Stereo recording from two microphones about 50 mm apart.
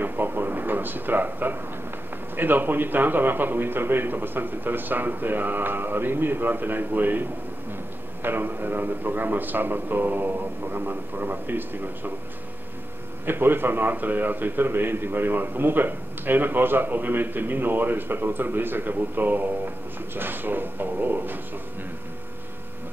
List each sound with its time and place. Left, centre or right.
0.0 s a sound: right
2.3 s a man's voice: right
13.2 s a man's voice: right